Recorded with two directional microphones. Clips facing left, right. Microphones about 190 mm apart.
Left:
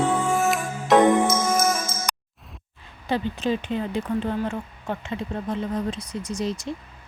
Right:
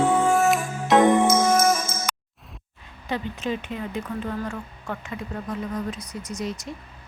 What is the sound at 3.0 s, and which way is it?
Speech, 30° left (ahead or behind).